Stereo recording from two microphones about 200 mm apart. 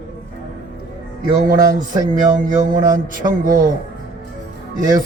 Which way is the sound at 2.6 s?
40° right (ahead or behind).